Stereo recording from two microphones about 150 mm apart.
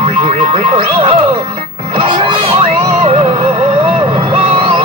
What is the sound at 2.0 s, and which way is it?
Music, 35° right (ahead or behind).